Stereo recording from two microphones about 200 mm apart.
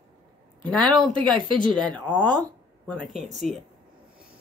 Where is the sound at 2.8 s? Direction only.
5° left (ahead or behind).